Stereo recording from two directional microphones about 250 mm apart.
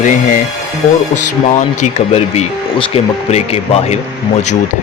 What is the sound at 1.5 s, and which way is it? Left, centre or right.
Speech, left.